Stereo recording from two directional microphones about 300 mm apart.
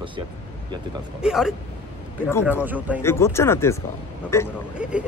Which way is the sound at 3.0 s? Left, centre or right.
Centre.